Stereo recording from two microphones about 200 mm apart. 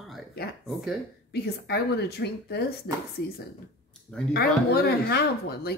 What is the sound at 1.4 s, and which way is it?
Speech, 55° left (ahead or behind).